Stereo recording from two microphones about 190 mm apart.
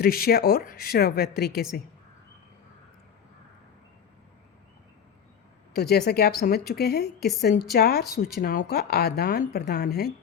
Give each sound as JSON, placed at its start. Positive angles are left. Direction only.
{"t": 0.0, "sound": "speech", "side_deg": 55}
{"t": 5.7, "sound": "a woman's voice", "side_deg": 55}